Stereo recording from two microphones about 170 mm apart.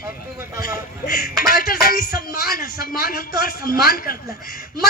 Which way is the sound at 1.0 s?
60° left (ahead or behind).